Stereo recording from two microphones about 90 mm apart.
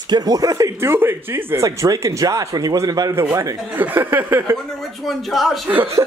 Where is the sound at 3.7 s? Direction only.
25° right (ahead or behind).